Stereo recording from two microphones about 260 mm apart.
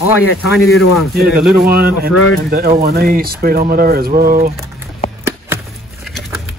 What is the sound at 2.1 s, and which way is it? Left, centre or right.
Speech, left.